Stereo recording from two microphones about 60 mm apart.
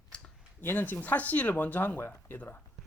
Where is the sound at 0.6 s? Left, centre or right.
Left.